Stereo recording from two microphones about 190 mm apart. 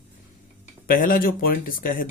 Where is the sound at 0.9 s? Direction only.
50° left (ahead or behind).